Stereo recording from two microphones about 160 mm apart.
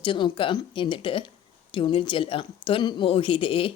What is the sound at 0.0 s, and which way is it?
Speech, 30° left (ahead or behind).